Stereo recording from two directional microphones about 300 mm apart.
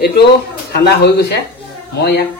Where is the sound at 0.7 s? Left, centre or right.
Left.